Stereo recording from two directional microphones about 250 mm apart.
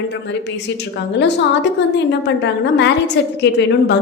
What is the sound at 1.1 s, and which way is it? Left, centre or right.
A woman's voice, left.